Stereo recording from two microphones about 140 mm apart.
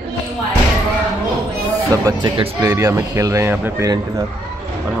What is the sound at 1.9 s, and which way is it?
Speech, 25° right (ahead or behind).